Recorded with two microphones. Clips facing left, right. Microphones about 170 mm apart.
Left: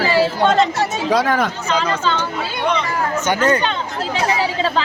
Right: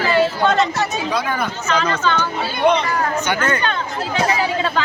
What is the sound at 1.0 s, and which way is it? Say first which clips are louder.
Speech: left 5 dB; 90° left.